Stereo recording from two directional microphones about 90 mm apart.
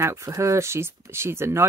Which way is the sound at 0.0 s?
35° right (ahead or behind).